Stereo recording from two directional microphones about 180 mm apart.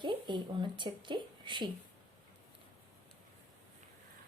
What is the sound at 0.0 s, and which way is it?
Speech, 25° right (ahead or behind).